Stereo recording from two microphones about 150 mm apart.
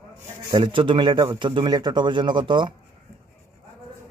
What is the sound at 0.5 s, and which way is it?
A man's voice, 30° right (ahead or behind).